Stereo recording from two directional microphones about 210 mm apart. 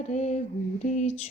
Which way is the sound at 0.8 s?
35° left (ahead or behind).